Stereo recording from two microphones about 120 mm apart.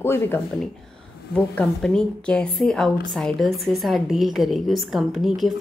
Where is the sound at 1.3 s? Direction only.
5° left (ahead or behind).